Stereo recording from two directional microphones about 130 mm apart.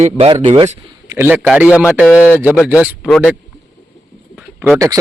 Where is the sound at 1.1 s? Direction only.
15° right (ahead or behind).